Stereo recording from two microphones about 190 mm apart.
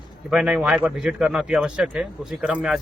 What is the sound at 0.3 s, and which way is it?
A man's voice, 5° right (ahead or behind).